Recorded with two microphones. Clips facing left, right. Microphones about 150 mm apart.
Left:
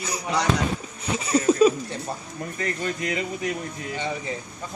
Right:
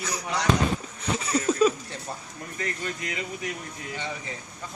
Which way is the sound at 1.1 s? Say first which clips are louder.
Left 5 dB; 20° left (ahead or behind).